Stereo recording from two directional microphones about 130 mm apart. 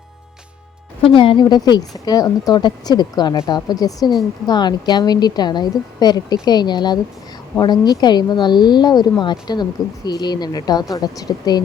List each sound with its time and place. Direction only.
1.0 s speech: 40° left (ahead or behind)